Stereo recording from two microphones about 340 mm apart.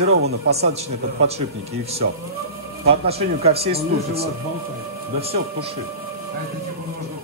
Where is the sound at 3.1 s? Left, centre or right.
Centre.